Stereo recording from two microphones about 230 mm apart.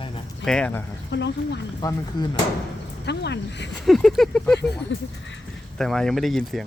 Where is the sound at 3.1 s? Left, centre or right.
Left.